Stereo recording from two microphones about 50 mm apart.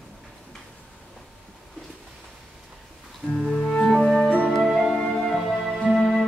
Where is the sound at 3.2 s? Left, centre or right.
Left.